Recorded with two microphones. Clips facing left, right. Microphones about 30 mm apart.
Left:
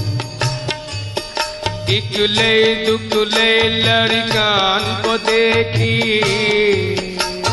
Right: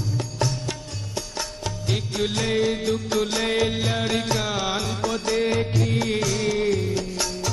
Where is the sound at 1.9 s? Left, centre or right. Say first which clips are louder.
Left 9 dB; left.